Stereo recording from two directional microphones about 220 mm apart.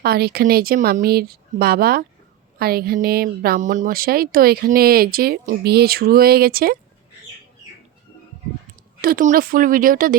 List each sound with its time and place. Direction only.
0.0 s speech: 45° right (ahead or behind)
9.0 s speech: 40° right (ahead or behind)